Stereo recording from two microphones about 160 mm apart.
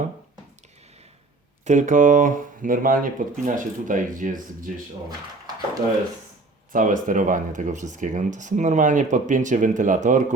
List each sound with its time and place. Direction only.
1.6 s speech: 50° right (ahead or behind)
6.7 s speech: 55° right (ahead or behind)